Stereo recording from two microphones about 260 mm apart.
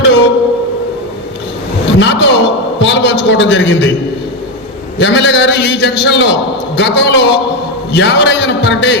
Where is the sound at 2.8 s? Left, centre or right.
Left.